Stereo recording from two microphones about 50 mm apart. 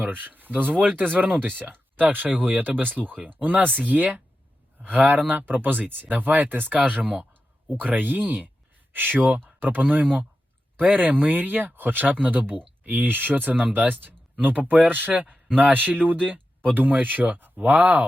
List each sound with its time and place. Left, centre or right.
0.2 s speech: right